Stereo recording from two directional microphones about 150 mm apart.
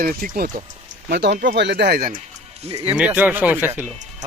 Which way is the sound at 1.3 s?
75° right (ahead or behind).